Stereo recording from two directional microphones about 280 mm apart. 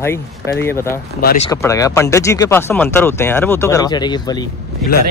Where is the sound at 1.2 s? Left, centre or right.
Left.